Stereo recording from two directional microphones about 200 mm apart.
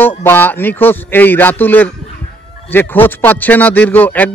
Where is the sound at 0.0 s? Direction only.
10° left (ahead or behind).